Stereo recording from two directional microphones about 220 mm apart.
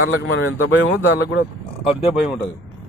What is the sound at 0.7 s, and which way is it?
Speech, 60° left (ahead or behind).